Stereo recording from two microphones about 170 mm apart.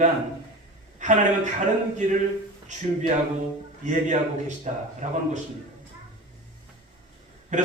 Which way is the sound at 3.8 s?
45° right (ahead or behind).